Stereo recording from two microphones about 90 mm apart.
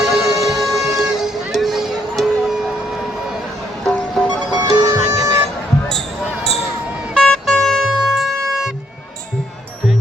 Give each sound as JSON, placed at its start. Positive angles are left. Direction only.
{"t": 0.1, "sound": "music", "side_deg": 0}
{"t": 3.8, "sound": "music", "side_deg": 10}
{"t": 4.5, "sound": "music", "side_deg": -40}
{"t": 7.1, "sound": "music", "side_deg": 5}